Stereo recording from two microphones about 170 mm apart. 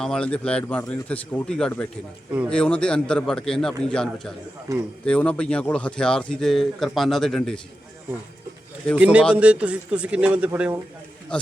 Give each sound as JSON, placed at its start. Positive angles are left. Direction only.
{"t": 0.0, "sound": "a man's voice", "side_deg": 5}
{"t": 4.7, "sound": "a man's voice", "side_deg": -20}
{"t": 5.0, "sound": "a man's voice", "side_deg": 5}
{"t": 9.0, "sound": "a man's voice", "side_deg": -5}
{"t": 11.3, "sound": "a man's voice", "side_deg": 5}